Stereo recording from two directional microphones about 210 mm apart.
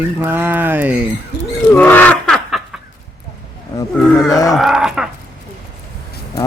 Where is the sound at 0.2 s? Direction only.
10° right (ahead or behind).